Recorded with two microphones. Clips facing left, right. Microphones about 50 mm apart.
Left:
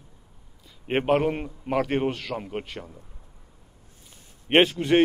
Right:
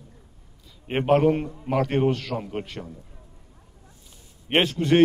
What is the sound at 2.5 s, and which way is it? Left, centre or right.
Speech, centre.